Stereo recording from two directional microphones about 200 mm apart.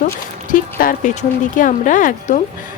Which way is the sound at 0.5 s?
45° left (ahead or behind).